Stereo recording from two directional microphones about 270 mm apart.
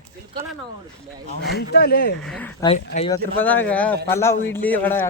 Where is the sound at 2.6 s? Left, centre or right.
Left.